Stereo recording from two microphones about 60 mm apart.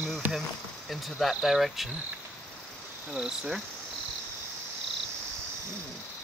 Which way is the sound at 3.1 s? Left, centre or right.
Centre.